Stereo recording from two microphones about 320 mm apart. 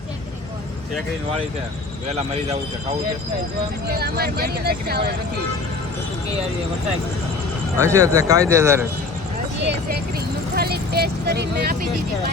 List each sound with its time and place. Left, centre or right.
2.0 s speech: centre
3.8 s speech: right
7.8 s speech: centre
10.5 s speech: right